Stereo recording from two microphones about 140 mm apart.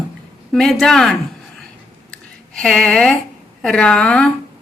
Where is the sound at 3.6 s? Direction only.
5° left (ahead or behind).